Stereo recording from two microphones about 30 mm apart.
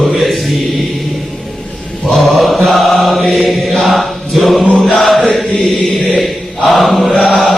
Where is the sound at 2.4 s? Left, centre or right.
Centre.